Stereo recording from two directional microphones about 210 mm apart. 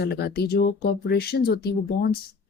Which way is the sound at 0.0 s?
50° left (ahead or behind).